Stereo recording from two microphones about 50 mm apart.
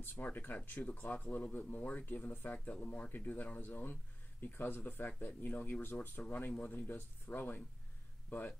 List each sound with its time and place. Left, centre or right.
0.0 s speech: left
6.2 s speech: left